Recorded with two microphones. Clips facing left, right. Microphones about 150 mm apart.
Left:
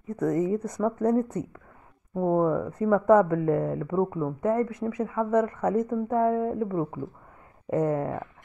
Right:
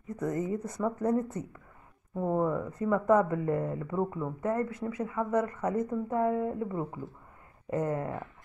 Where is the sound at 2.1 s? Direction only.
35° left (ahead or behind).